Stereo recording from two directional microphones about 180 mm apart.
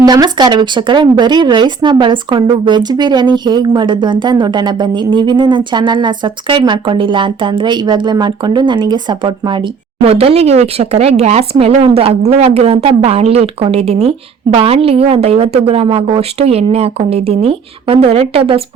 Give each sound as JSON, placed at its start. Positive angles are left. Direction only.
{"t": 0.0, "sound": "a woman's voice", "side_deg": -25}